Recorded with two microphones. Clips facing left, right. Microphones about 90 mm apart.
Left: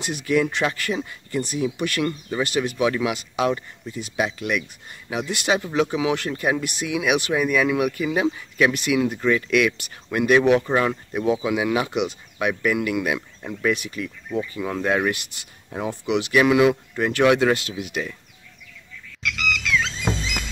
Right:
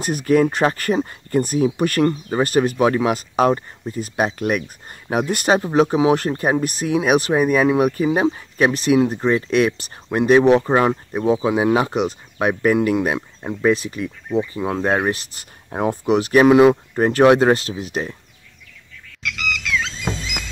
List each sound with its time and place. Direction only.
0.0 s speech: 40° right (ahead or behind)
15.7 s speech: 50° right (ahead or behind)
19.2 s a sound: centre (ahead or behind)